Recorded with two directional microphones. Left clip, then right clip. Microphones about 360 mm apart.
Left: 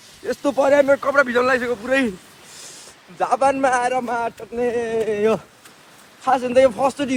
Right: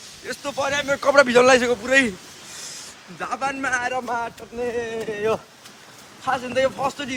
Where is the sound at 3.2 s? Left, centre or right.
Centre.